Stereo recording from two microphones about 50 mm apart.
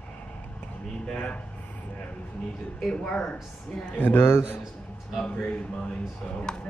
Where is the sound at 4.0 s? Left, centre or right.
Left.